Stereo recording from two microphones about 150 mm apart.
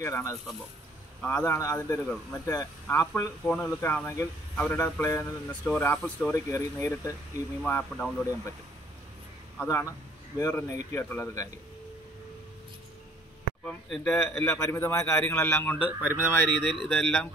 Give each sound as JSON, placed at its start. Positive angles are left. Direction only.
{"t": 0.0, "sound": "a man's voice", "side_deg": 20}
{"t": 9.6, "sound": "a man's voice", "side_deg": 15}
{"t": 13.7, "sound": "a man's voice", "side_deg": 5}
{"t": 15.8, "sound": "speech", "side_deg": -10}
{"t": 16.4, "sound": "speech", "side_deg": -30}
{"t": 16.8, "sound": "speech", "side_deg": 5}